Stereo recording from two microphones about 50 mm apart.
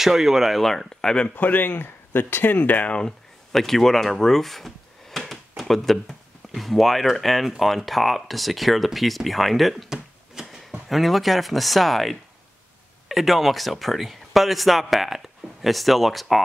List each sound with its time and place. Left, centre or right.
0.0 s speech: centre
1.3 s speech: left
3.0 s speech: centre
9.8 s computer keyboard: centre
10.9 s speech: centre